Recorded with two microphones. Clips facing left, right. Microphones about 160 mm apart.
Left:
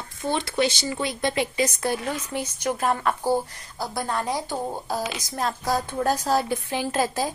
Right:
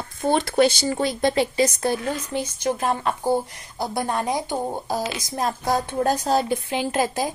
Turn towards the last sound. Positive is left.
turn(degrees=-20)  # may be behind; listen again after turning